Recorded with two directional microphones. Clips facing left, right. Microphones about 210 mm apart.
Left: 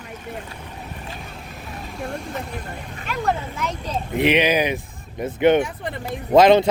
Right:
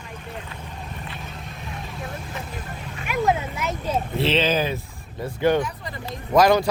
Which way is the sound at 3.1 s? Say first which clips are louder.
Right 2 dB; 10° right (ahead or behind).